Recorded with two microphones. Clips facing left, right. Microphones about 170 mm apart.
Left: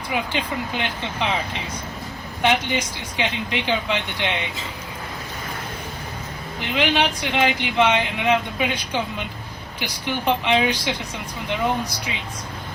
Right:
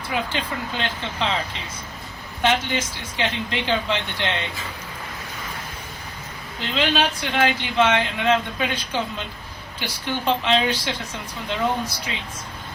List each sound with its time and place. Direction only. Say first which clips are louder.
0.1 s speech: left 1 dB; 15° left (ahead or behind)
6.6 s speech: left 1 dB; 15° left (ahead or behind)